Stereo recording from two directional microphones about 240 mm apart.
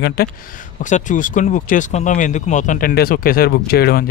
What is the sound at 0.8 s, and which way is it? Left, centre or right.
Speech, left.